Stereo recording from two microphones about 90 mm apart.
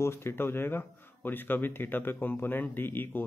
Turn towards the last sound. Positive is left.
turn(degrees=20)  # may be behind; listen again after turning